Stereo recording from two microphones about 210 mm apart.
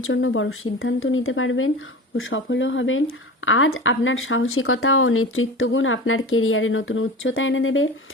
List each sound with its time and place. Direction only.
0.0 s speech: 70° left (ahead or behind)